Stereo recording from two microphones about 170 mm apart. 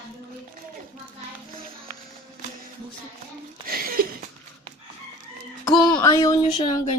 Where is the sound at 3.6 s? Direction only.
55° right (ahead or behind).